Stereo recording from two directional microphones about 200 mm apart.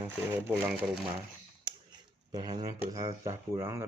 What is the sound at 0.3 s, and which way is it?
Speech, 10° right (ahead or behind).